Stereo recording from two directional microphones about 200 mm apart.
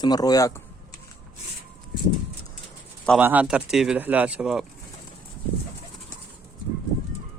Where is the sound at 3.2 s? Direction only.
10° right (ahead or behind).